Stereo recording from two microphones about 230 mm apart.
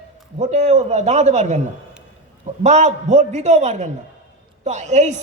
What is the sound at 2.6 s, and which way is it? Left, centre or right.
A man's voice, right.